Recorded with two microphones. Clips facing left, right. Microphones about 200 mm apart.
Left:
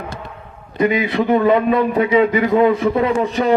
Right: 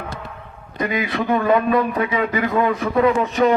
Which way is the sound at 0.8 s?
25° left (ahead or behind).